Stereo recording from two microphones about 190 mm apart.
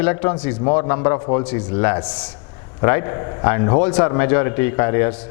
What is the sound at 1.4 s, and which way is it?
A man's voice, 10° left (ahead or behind).